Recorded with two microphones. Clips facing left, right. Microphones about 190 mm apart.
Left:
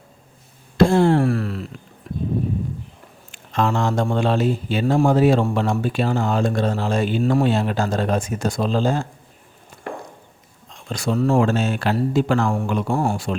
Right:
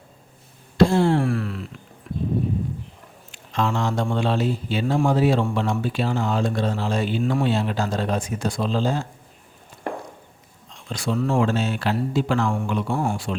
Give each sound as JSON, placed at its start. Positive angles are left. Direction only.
{"t": 0.8, "sound": "a sound", "side_deg": 50}
{"t": 3.3, "sound": "speech", "side_deg": 50}
{"t": 10.7, "sound": "speech", "side_deg": 50}